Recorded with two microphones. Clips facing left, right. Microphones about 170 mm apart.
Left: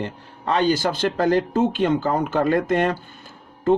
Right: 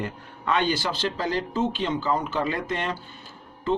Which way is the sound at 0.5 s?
40° left (ahead or behind).